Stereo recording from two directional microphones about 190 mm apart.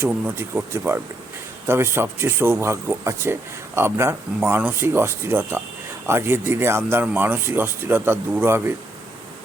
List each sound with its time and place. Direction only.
0.0 s speech: 10° right (ahead or behind)